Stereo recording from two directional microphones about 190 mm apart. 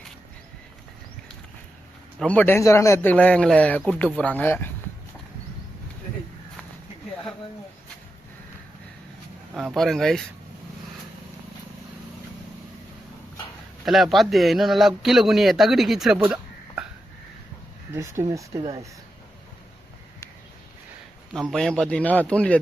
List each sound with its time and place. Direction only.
2.1 s a man's voice: 5° left (ahead or behind)
9.6 s a man's voice: centre (ahead or behind)
13.8 s a man's voice: centre (ahead or behind)
17.9 s speech: 15° right (ahead or behind)
21.3 s a man's voice: centre (ahead or behind)